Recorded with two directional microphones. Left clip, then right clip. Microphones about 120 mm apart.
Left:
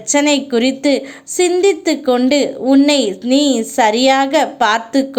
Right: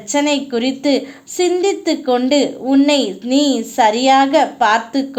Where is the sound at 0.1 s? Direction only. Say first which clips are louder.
Left 3 dB; 25° left (ahead or behind).